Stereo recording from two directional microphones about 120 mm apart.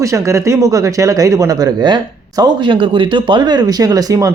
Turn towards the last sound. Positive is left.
turn(degrees=-30)  # may be behind; listen again after turning